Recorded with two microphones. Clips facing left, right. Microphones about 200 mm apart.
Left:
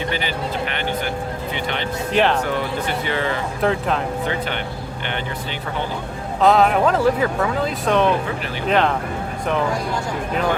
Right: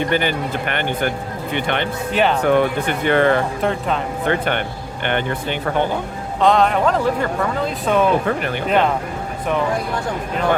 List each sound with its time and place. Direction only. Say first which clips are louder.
0.1 s a man's voice: right 4 dB; 55° right (ahead or behind)
2.1 s speech: even; centre (ahead or behind)
2.5 s speech: right 6 dB; 55° right (ahead or behind)
3.6 s speech: even; centre (ahead or behind)
4.3 s speech: right 4 dB; 55° right (ahead or behind)
6.4 s speech: even; 5° left (ahead or behind)